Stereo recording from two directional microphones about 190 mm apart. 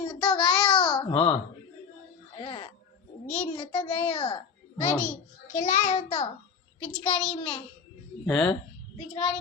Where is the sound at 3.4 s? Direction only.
30° left (ahead or behind).